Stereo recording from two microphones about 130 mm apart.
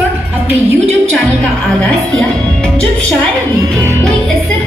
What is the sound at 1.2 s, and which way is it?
Speech, 10° left (ahead or behind).